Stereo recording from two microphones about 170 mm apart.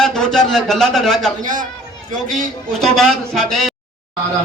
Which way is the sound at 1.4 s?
50° right (ahead or behind).